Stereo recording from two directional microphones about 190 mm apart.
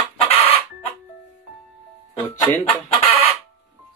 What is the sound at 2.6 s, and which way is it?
Chicken, 30° left (ahead or behind).